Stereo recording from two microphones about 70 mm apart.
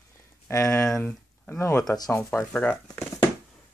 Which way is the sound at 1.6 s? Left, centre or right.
Left.